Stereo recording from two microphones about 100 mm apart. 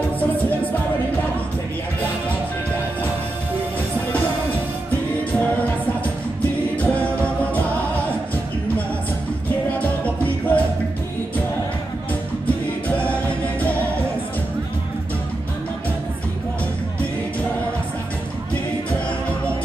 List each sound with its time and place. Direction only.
6.8 s music: 15° left (ahead or behind)
9.8 s music: 15° left (ahead or behind)
12.4 s music: 15° left (ahead or behind)